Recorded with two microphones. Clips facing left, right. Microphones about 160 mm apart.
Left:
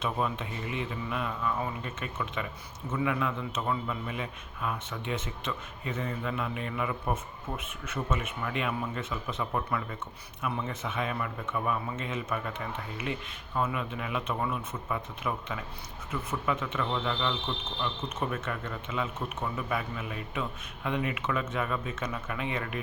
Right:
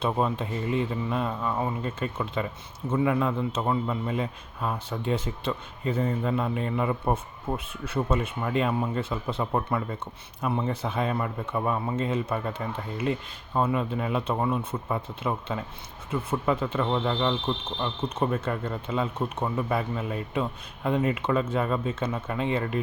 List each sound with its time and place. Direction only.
0.0 s a man's voice: 35° right (ahead or behind)